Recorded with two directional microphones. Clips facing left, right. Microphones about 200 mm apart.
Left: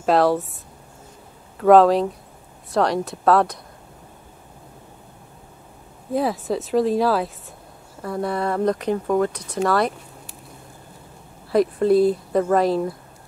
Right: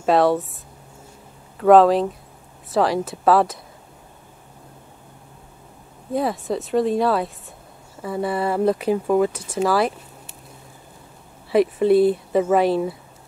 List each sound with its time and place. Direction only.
0.0 s speech: centre (ahead or behind)
1.6 s speech: centre (ahead or behind)
6.1 s speech: centre (ahead or behind)
11.5 s speech: 5° right (ahead or behind)